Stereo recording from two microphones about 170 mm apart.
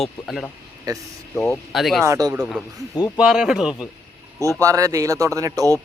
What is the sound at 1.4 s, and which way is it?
Speech, centre (ahead or behind).